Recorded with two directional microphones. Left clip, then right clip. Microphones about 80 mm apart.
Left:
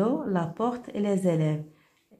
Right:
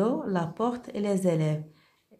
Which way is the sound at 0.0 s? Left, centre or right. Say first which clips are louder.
Left 1 dB; right.